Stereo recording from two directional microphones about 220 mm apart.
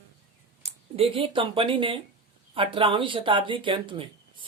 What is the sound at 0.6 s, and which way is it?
Speech, 30° right (ahead or behind).